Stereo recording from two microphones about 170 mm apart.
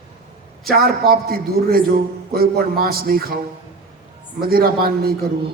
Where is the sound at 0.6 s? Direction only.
60° right (ahead or behind).